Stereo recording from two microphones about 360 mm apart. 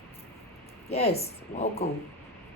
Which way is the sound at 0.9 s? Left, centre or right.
Centre.